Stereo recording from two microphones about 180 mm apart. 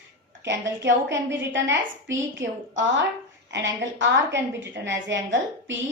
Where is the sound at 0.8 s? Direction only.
90° right.